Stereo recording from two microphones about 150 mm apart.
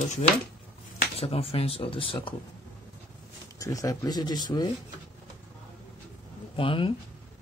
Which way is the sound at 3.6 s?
20° left (ahead or behind).